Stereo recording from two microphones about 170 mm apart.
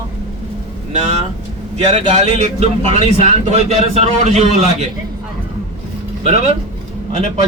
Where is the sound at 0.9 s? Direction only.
40° right (ahead or behind).